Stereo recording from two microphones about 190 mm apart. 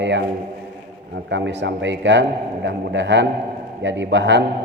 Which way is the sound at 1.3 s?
65° right (ahead or behind).